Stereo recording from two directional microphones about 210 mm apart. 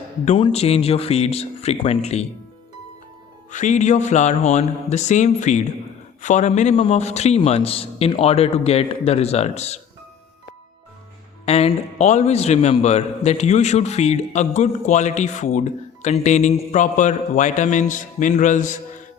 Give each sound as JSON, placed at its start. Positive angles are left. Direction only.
{"t": 0.3, "sound": "a man's voice", "side_deg": 25}
{"t": 3.5, "sound": "a man's voice", "side_deg": 35}
{"t": 11.4, "sound": "a man's voice", "side_deg": 30}